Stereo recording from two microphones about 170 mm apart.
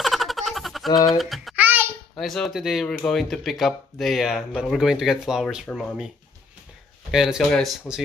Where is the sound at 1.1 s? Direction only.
Centre (ahead or behind).